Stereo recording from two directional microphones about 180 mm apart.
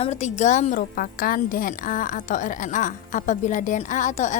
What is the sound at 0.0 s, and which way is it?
A woman's voice, 40° left (ahead or behind).